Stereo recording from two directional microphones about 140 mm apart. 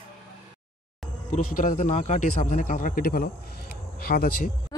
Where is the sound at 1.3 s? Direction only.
80° left.